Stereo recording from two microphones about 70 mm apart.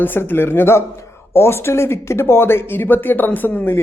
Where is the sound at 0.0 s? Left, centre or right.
Left.